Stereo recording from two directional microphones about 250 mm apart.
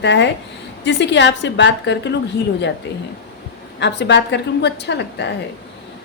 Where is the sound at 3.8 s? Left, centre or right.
Left.